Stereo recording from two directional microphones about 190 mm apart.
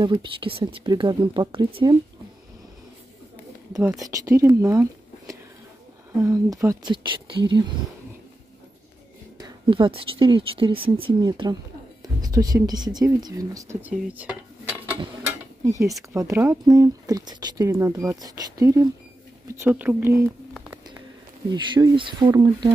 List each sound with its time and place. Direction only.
0.0 s speech: 25° right (ahead or behind)
3.7 s speech: centre (ahead or behind)
4.0 s speech: 15° right (ahead or behind)
9.4 s speech: 25° right (ahead or behind)
13.9 s dishes: 10° right (ahead or behind)
15.6 s speech: 15° right (ahead or behind)
20.5 s a sound: 5° right (ahead or behind)
21.5 s speech: 20° right (ahead or behind)